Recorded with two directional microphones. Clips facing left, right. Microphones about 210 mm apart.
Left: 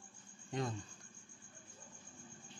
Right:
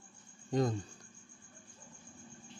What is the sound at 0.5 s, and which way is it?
Speech, 40° right (ahead or behind).